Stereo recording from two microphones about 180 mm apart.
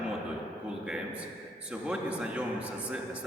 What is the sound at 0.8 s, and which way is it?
A man's voice, 5° right (ahead or behind).